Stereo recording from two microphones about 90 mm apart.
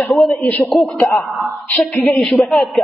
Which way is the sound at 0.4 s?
15° left (ahead or behind).